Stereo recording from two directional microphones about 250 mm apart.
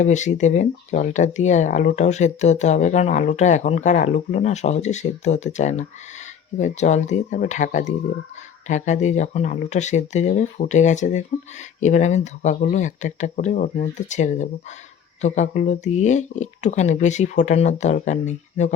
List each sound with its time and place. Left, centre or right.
0.0 s speech: left